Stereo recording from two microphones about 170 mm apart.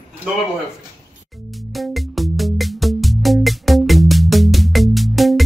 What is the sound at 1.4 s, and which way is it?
Music, centre (ahead or behind).